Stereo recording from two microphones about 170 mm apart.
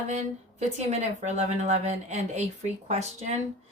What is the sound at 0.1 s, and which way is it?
A woman's voice, 40° right (ahead or behind).